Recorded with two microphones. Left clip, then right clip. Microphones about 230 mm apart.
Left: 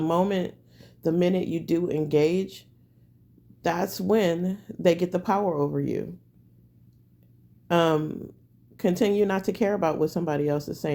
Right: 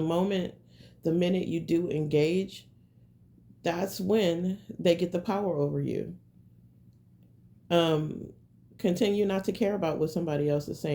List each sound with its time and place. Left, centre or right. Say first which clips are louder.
0.0 s speech: left 4 dB; left
7.7 s speech: left 3 dB; left